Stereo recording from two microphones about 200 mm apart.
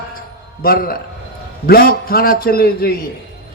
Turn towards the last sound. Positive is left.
turn(degrees=50)  # may be behind; listen again after turning